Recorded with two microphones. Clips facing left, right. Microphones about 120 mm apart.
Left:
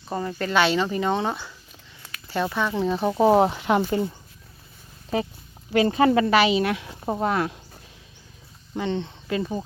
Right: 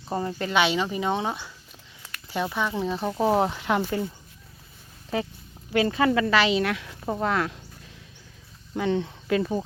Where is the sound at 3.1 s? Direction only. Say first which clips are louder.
Left 5 dB; 25° left (ahead or behind).